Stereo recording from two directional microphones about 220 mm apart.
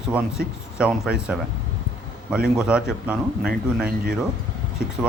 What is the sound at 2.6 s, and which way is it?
A man's voice, 5° right (ahead or behind).